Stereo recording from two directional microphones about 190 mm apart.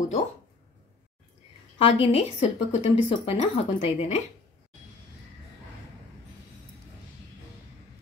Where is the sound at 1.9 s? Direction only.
30° left (ahead or behind).